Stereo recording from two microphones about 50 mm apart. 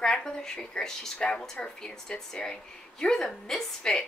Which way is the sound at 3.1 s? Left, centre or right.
Centre.